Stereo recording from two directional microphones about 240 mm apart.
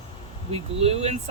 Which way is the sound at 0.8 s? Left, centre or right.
Right.